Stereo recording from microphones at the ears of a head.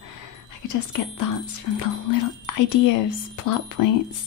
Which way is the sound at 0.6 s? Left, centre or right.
Left.